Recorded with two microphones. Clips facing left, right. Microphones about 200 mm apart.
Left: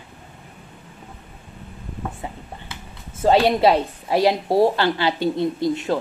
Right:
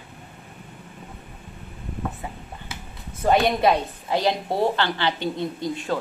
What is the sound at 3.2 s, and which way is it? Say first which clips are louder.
A woman's voice: left 3 dB; 30° left (ahead or behind).